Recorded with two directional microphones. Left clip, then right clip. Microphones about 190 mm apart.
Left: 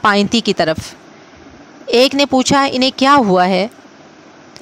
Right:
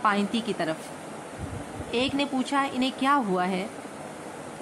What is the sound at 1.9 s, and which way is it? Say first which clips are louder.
Speech: left 16 dB; 60° left (ahead or behind).